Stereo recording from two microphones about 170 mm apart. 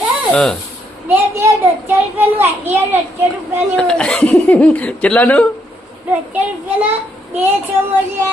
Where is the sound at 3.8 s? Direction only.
5° left (ahead or behind).